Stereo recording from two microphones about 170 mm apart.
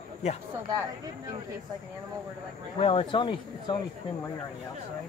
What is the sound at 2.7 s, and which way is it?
Speech, 30° left (ahead or behind).